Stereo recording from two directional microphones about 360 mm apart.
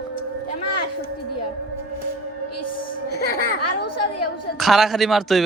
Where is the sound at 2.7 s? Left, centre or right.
Left.